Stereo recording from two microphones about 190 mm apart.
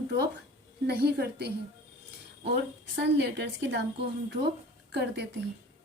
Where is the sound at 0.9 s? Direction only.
60° right (ahead or behind).